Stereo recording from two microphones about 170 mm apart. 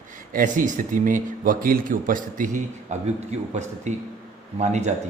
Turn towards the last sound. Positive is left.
turn(degrees=-45)  # may be behind; listen again after turning